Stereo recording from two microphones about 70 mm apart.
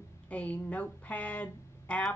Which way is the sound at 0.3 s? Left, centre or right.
Left.